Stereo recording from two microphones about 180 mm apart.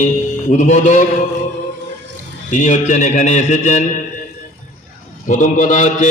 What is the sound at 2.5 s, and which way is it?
A man's voice, 40° left (ahead or behind).